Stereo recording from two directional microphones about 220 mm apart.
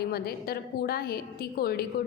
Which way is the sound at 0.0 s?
45° left (ahead or behind).